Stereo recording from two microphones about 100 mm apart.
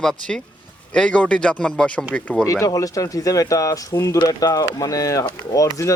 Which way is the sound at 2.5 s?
35° left (ahead or behind).